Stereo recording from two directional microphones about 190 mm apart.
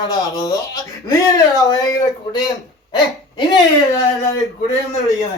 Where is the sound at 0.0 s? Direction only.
20° left (ahead or behind).